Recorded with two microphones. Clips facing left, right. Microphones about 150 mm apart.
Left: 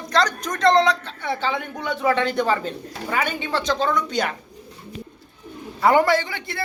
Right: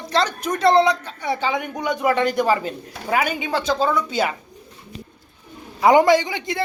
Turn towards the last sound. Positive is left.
turn(degrees=-15)  # may be behind; listen again after turning